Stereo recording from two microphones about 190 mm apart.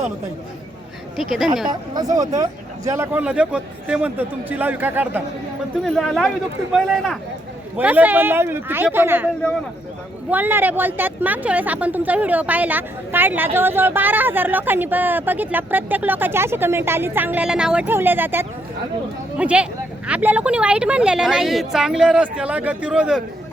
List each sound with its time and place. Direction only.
1.1 s a woman's voice: centre (ahead or behind)
1.6 s speech: 20° right (ahead or behind)
5.8 s a woman's voice: centre (ahead or behind)